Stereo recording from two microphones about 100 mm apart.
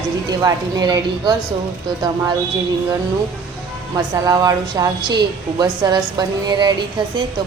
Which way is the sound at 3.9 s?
35° right (ahead or behind).